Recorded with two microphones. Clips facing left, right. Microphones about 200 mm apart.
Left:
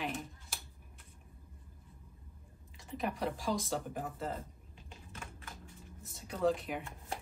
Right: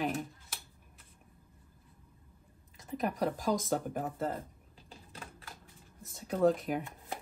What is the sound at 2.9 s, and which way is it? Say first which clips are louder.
Speech: right 4 dB; 45° right (ahead or behind).